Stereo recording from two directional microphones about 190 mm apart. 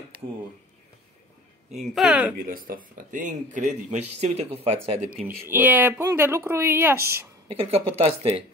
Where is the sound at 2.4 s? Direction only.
50° right (ahead or behind).